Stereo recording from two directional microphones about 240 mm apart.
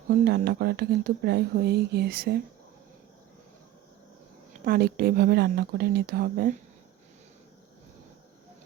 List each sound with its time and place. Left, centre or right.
0.1 s speech: right
4.6 s speech: right